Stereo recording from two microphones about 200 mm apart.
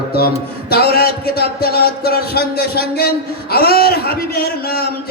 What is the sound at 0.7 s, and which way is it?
A man's voice, 50° left (ahead or behind).